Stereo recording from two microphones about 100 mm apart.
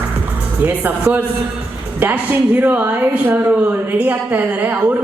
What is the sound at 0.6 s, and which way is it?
Speech, 15° right (ahead or behind).